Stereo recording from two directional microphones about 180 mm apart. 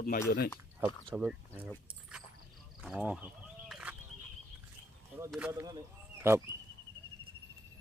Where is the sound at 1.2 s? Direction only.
5° right (ahead or behind).